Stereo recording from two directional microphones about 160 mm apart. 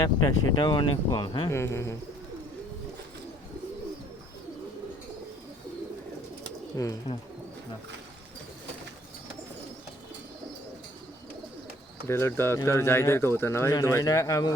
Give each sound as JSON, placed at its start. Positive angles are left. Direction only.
{"t": 0.0, "sound": "speech", "side_deg": 20}
{"t": 1.5, "sound": "speech", "side_deg": 15}
{"t": 6.8, "sound": "speech", "side_deg": 20}
{"t": 12.0, "sound": "speech", "side_deg": 15}